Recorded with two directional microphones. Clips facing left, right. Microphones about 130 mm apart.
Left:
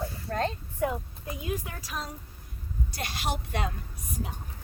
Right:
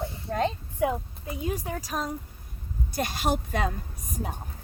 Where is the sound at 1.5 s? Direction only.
35° right (ahead or behind).